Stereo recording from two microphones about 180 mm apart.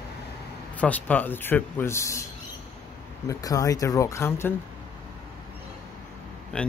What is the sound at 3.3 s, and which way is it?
Speech, 20° left (ahead or behind).